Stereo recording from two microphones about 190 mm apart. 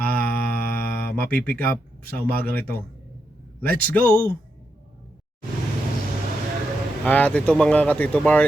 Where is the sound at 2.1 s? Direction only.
50° right (ahead or behind).